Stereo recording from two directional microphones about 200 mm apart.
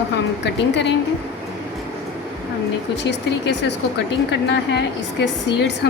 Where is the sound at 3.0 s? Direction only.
60° left (ahead or behind).